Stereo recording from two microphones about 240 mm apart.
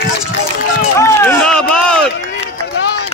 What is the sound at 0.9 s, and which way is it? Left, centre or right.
Run, centre.